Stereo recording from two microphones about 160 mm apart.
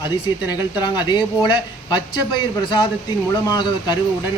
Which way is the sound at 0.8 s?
25° left (ahead or behind).